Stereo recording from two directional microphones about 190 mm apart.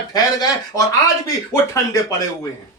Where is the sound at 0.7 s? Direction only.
20° left (ahead or behind).